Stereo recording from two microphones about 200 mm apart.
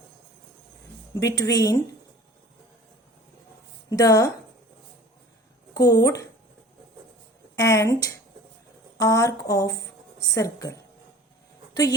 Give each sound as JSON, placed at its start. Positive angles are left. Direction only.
{"t": 1.2, "sound": "a woman's voice", "side_deg": 15}
{"t": 3.8, "sound": "a woman's voice", "side_deg": 15}
{"t": 5.7, "sound": "speech", "side_deg": 20}
{"t": 7.5, "sound": "a woman's voice", "side_deg": 15}